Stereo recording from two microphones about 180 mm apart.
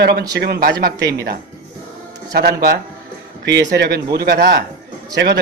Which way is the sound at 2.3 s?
65° right (ahead or behind).